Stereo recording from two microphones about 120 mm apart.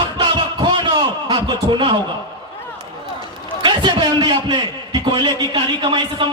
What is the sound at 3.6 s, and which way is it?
A man's voice, 40° right (ahead or behind).